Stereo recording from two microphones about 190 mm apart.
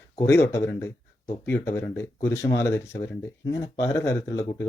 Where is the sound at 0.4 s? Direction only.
15° left (ahead or behind).